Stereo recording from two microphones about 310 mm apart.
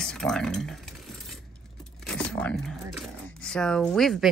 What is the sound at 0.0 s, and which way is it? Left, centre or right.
Speech, centre.